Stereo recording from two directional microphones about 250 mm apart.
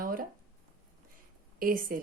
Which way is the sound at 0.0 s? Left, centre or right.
Right.